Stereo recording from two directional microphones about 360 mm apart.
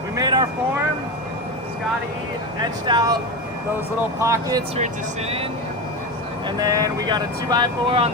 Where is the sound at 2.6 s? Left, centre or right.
Centre.